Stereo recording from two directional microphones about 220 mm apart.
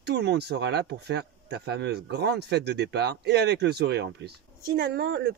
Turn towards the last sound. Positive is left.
turn(degrees=-45)  # may be behind; listen again after turning